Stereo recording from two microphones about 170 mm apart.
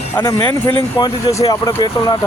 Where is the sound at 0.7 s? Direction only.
25° left (ahead or behind).